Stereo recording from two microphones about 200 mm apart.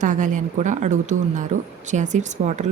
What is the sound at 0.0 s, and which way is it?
A woman's voice, 40° right (ahead or behind).